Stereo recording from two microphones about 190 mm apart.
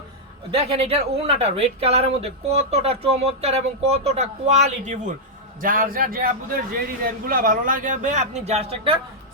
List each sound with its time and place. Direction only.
0.5 s a man's voice: 30° right (ahead or behind)